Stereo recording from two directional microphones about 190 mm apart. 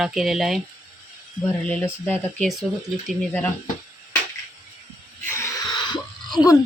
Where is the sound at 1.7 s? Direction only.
5° left (ahead or behind).